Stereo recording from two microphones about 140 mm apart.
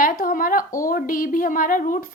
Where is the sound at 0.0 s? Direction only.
90° left.